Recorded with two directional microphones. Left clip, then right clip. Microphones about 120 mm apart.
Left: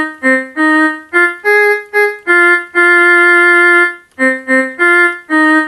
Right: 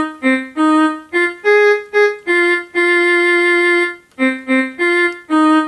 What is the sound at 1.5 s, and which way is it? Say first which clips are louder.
Music: left 2 dB; 25° right (ahead or behind).